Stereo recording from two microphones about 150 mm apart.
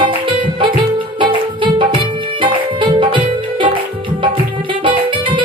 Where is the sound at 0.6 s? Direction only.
35° right (ahead or behind).